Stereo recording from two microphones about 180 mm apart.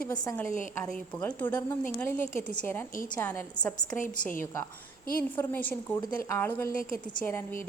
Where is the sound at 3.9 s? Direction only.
45° left (ahead or behind).